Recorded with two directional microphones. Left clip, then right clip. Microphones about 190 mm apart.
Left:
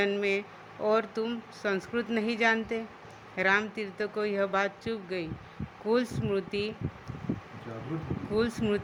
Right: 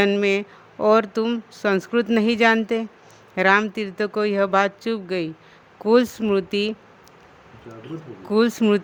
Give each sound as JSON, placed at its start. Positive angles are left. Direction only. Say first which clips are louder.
{"t": 0.0, "sound": "speech", "louder": "right 9 dB", "side_deg": -65}
{"t": 8.3, "sound": "speech", "louder": "right 10 dB", "side_deg": -65}